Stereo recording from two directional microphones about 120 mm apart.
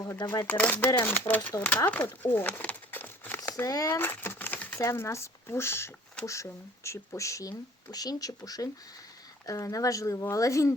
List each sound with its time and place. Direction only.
0.0 s speech: 30° left (ahead or behind)
0.3 s speech: 15° left (ahead or behind)
1.5 s crumpling: 20° left (ahead or behind)
3.5 s speech: 30° left (ahead or behind)
3.9 s typewriter: 20° left (ahead or behind)
4.8 s speech: 25° left (ahead or behind)